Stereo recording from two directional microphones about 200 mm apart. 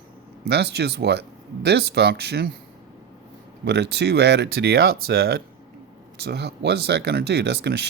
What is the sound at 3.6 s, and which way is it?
Speech, 55° right (ahead or behind).